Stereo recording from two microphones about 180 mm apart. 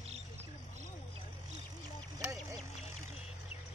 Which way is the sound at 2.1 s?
20° right (ahead or behind).